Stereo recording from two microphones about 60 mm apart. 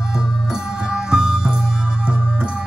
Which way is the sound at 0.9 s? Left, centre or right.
Centre.